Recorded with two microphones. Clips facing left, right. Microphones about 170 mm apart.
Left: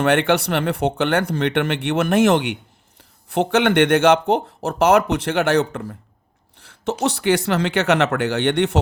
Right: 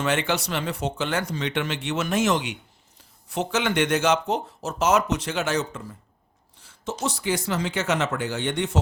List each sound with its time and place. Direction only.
0.0 s speech: 60° left (ahead or behind)
6.6 s a sound: 65° left (ahead or behind)
7.0 s speech: 65° left (ahead or behind)